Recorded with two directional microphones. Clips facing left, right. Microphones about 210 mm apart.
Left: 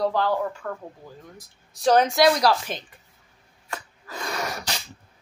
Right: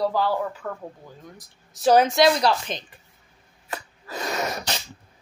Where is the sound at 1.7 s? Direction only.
5° right (ahead or behind).